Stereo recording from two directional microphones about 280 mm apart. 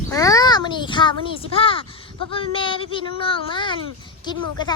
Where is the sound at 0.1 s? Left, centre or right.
Centre.